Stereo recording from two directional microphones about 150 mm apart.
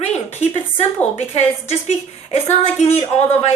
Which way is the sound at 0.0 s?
45° left (ahead or behind).